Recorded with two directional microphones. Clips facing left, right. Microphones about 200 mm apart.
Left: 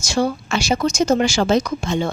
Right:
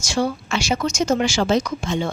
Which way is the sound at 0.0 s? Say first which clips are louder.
Left 2 dB; 40° left (ahead or behind).